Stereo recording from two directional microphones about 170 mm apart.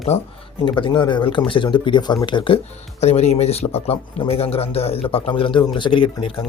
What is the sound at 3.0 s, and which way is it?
Speech, 40° left (ahead or behind).